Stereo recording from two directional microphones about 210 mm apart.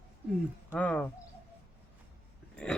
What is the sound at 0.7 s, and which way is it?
Speech, 5° left (ahead or behind).